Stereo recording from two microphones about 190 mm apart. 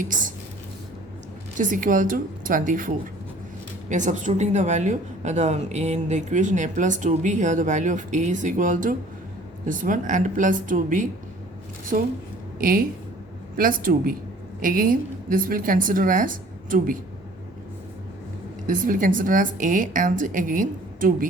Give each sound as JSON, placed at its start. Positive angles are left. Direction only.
{"t": 0.0, "sound": "a woman's voice", "side_deg": -45}
{"t": 1.5, "sound": "a woman's voice", "side_deg": -45}
{"t": 18.7, "sound": "a woman's voice", "side_deg": -45}